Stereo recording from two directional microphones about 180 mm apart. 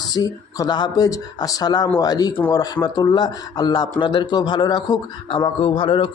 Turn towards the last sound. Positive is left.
turn(degrees=25)  # may be behind; listen again after turning